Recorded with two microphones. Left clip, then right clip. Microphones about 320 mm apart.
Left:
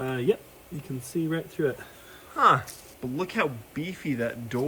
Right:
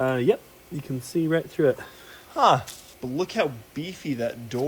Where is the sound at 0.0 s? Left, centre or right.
Right.